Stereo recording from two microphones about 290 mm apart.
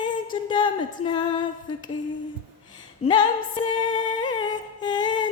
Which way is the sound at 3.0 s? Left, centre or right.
Centre.